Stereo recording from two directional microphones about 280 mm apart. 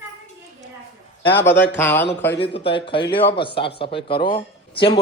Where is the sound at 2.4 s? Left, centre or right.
Centre.